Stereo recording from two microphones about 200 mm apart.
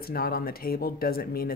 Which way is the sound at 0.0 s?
50° left (ahead or behind).